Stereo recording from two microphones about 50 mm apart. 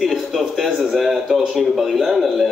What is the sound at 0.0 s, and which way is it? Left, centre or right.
Speech, centre.